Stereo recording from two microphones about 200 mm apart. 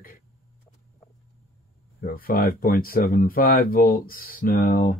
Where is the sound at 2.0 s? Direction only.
45° left (ahead or behind).